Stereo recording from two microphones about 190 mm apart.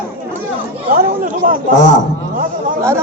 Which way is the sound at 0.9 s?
45° right (ahead or behind).